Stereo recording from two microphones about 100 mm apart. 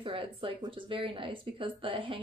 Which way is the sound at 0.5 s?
50° right (ahead or behind).